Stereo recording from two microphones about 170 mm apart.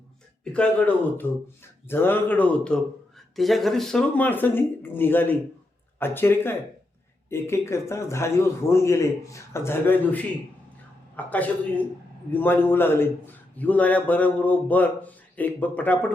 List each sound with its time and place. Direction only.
0.5 s a man's voice: 5° left (ahead or behind)